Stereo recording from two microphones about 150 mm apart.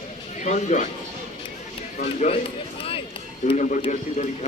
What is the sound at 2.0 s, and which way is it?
Speech, 45° left (ahead or behind).